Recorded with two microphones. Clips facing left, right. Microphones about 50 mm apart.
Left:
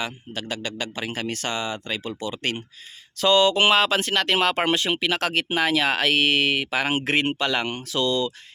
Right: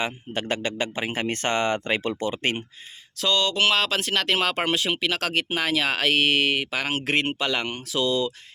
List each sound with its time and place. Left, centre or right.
0.0 s speech: right
2.3 s speech: right
3.2 s speech: centre